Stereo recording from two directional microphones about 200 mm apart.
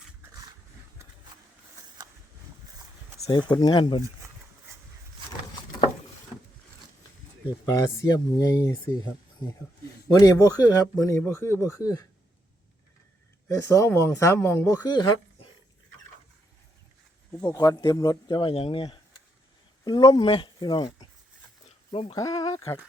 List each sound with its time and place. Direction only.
3.2 s speech: 20° left (ahead or behind)
7.6 s speech: 20° left (ahead or behind)
10.1 s speech: 15° left (ahead or behind)
13.5 s speech: 15° left (ahead or behind)
17.4 s speech: 20° left (ahead or behind)
22.1 s speech: 20° left (ahead or behind)